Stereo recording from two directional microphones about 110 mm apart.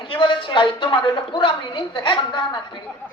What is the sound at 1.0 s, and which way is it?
A woman's voice, 50° left (ahead or behind).